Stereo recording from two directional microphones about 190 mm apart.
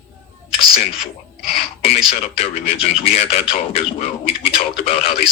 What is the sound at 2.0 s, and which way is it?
Speech, 30° left (ahead or behind).